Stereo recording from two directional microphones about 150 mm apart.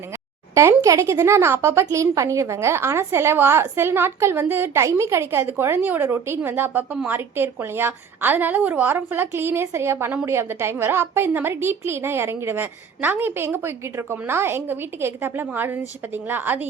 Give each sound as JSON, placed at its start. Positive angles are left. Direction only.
{"t": 0.5, "sound": "speech", "side_deg": -20}